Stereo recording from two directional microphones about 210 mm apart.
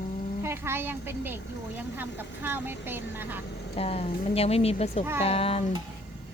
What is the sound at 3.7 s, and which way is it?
Speech, 30° left (ahead or behind).